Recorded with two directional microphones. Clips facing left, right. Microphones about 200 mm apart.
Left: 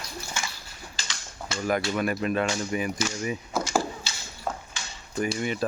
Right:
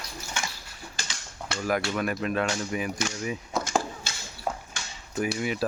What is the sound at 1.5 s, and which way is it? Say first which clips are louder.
Speech: left 1 dB; 65° right (ahead or behind).